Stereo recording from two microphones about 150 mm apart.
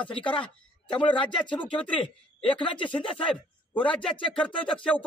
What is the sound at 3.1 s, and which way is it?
Speech, 10° left (ahead or behind).